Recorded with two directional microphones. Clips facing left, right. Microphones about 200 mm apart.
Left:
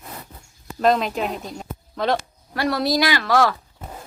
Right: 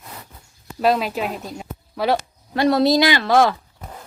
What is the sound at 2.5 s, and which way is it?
A woman's voice, 25° right (ahead or behind).